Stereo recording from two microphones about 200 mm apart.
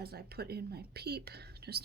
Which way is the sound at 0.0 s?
50° right (ahead or behind).